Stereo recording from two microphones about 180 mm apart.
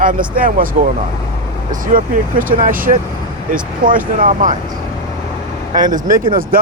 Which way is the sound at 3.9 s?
45° right (ahead or behind).